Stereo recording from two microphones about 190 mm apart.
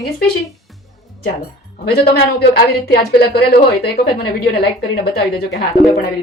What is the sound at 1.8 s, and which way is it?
Speech, 55° left (ahead or behind).